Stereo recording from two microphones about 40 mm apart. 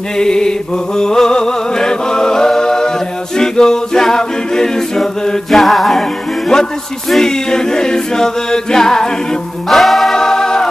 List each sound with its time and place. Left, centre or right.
0.2 s music: centre
3.3 s a capella: centre
5.6 s music: centre
6.5 s a capella: centre
9.7 s music: centre
10.1 s music: centre